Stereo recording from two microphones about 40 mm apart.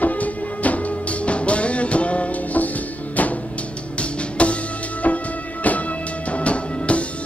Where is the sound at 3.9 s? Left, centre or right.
Left.